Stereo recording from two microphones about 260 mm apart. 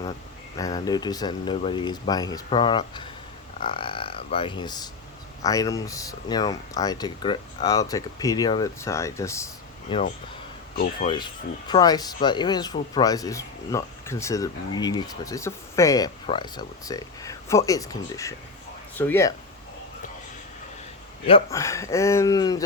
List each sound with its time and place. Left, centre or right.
0.5 s speech: centre
10.8 s speech: left
11.7 s speech: centre
21.2 s speech: centre